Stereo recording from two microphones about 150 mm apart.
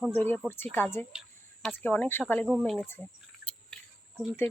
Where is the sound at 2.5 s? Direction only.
5° right (ahead or behind).